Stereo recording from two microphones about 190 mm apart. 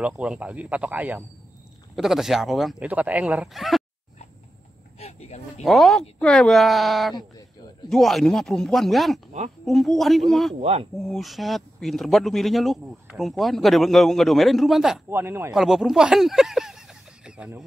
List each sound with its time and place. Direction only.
0.0 s a man's voice: 5° right (ahead or behind)
4.9 s speech: 35° left (ahead or behind)
5.6 s a man's voice: centre (ahead or behind)
10.6 s speech: 30° right (ahead or behind)
11.0 s a man's voice: centre (ahead or behind)
15.0 s speech: 10° right (ahead or behind)
15.5 s speech: centre (ahead or behind)